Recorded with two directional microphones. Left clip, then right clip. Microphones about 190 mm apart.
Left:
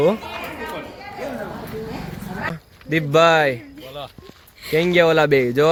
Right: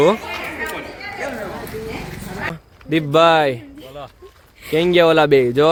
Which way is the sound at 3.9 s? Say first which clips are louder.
Left 1 dB; 5° left (ahead or behind).